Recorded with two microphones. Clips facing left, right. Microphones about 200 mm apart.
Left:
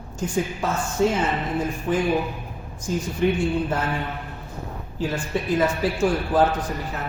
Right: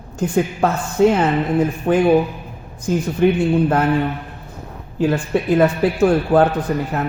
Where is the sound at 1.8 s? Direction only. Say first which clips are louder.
Right 8 dB; 60° right (ahead or behind).